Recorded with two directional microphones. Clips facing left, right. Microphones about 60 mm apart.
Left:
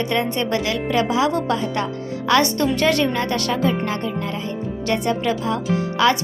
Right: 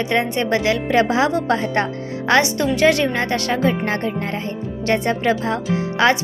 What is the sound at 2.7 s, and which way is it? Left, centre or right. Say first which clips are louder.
A woman's voice: right 5 dB; centre.